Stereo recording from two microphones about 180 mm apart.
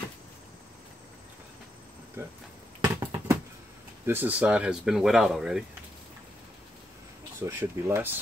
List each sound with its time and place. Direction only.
2.2 s speech: 15° right (ahead or behind)
2.8 s a sound: 15° right (ahead or behind)
4.0 s speech: 10° right (ahead or behind)
7.4 s speech: 15° right (ahead or behind)